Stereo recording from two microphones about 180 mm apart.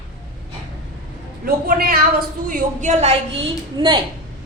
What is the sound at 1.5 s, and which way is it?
A woman's voice, 55° right (ahead or behind).